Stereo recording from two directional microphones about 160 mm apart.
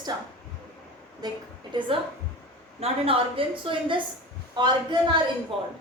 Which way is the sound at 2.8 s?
35° right (ahead or behind).